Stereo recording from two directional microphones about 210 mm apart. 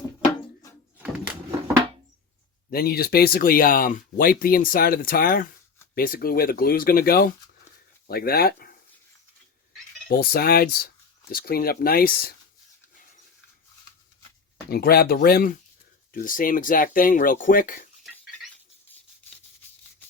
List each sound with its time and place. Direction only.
2.6 s speech: 45° left (ahead or behind)
10.1 s speech: 45° left (ahead or behind)
14.7 s speech: 50° left (ahead or behind)